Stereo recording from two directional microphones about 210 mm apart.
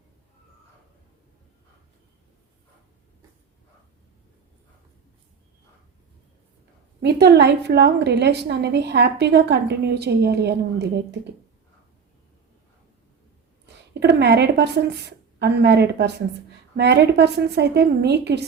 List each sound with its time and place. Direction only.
7.0 s a woman's voice: 50° right (ahead or behind)
14.0 s a woman's voice: 55° right (ahead or behind)